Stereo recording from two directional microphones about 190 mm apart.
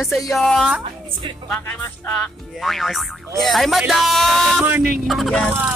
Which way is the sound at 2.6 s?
Centre (ahead or behind).